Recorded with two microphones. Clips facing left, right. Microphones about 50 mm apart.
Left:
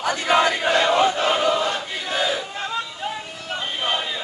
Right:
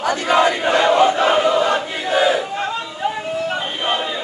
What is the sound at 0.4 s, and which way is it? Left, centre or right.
Battle cry, right.